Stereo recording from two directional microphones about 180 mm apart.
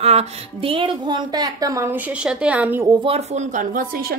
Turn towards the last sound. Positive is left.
turn(degrees=-50)  # may be behind; listen again after turning